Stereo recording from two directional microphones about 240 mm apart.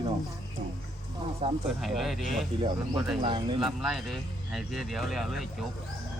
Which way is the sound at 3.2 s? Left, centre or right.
Right.